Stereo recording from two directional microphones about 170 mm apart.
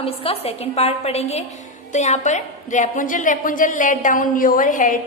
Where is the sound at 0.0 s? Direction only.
35° left (ahead or behind).